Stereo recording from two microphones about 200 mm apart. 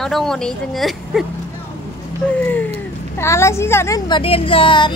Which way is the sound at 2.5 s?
10° left (ahead or behind).